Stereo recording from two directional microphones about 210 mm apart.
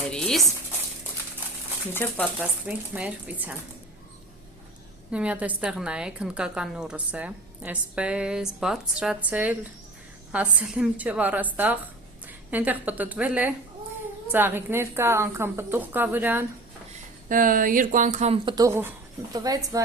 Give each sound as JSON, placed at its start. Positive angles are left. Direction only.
{"t": 0.1, "sound": "a sound", "side_deg": 5}
{"t": 1.9, "sound": "speech", "side_deg": 10}
{"t": 2.4, "sound": "a woman's voice", "side_deg": -5}
{"t": 5.1, "sound": "a woman's voice", "side_deg": -5}
{"t": 17.2, "sound": "speech", "side_deg": -40}